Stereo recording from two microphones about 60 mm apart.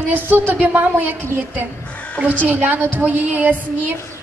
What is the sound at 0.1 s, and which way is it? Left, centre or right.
A woman's voice, right.